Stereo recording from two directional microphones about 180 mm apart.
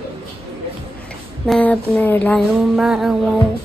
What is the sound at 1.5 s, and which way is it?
Speech, 5° left (ahead or behind).